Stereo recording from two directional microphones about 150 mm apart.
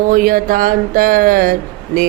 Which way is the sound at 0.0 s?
70° right (ahead or behind).